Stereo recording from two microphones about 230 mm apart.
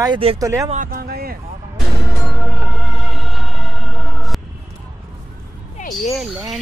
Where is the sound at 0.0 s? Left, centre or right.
Right.